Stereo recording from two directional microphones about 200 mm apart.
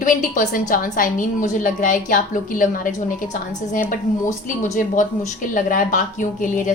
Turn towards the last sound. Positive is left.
turn(degrees=40)  # may be behind; listen again after turning